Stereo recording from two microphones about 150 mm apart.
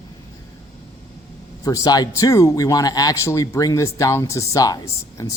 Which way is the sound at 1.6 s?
25° left (ahead or behind).